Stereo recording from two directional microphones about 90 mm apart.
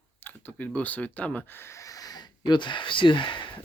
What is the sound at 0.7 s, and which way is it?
Speech, 15° left (ahead or behind).